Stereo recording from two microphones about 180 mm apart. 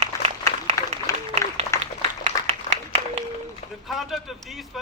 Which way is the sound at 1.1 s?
20° left (ahead or behind).